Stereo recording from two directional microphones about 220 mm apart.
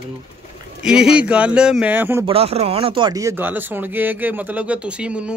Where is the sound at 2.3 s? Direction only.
25° right (ahead or behind).